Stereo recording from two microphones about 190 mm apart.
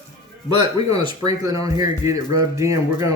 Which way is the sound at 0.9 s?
20° right (ahead or behind).